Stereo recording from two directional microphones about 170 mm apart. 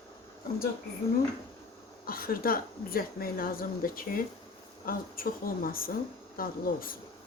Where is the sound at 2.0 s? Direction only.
60° left (ahead or behind).